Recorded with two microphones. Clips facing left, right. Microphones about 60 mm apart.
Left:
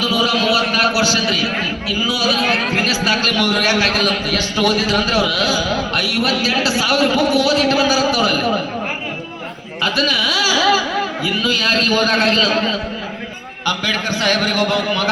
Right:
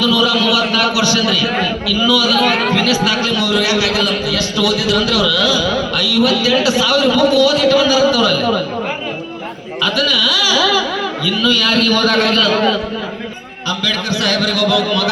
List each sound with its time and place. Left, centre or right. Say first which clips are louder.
0.0 s a man's voice: right 3 dB; left
2.7 s a man's voice: right 3 dB; left
3.2 s a man's voice: right 1 dB; left
9.8 s a man's voice: right 1 dB; left
13.7 s a man's voice: even; left